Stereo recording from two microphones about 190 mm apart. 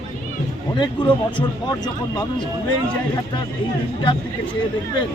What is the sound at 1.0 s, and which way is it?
Speech, 25° left (ahead or behind).